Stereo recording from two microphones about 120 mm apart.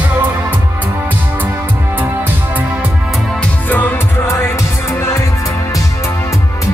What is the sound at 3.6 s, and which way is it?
Music, 15° left (ahead or behind).